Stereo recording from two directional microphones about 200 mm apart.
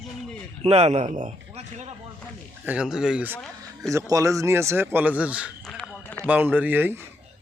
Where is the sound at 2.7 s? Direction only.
5° right (ahead or behind).